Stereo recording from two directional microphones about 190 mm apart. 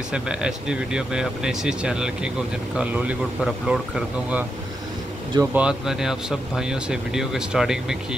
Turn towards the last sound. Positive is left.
turn(degrees=-5)  # may be behind; listen again after turning